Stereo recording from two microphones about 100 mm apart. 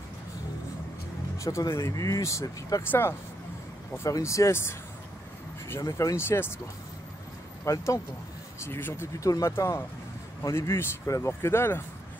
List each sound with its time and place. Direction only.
1.4 s speech: 30° left (ahead or behind)
5.8 s speech: 35° left (ahead or behind)
7.6 s speech: 30° left (ahead or behind)